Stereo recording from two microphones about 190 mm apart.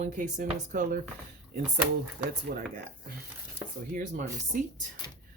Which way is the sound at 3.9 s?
45° right (ahead or behind).